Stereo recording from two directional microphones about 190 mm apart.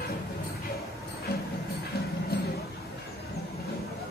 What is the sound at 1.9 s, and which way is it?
Music, 55° left (ahead or behind).